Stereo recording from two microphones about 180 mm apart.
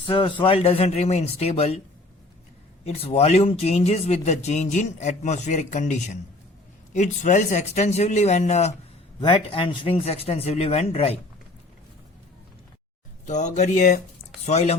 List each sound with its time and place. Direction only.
0.0 s speech: 25° left (ahead or behind)
2.8 s speech: 35° left (ahead or behind)
9.2 s speech: 30° left (ahead or behind)
13.2 s speech: 40° left (ahead or behind)